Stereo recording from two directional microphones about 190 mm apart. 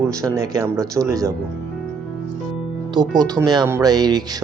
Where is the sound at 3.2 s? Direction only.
20° right (ahead or behind).